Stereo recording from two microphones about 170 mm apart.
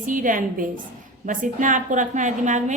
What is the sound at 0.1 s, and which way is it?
A woman's voice, 50° right (ahead or behind).